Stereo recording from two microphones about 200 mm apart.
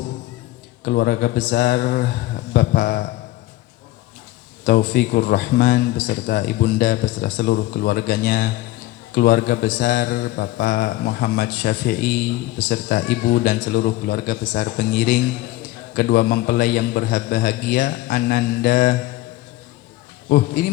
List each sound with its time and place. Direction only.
0.9 s a man's voice: 55° left (ahead or behind)
4.6 s a man's voice: 55° left (ahead or behind)
20.3 s speech: 50° left (ahead or behind)